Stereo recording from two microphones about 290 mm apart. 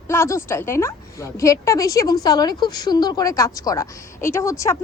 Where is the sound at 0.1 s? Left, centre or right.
Centre.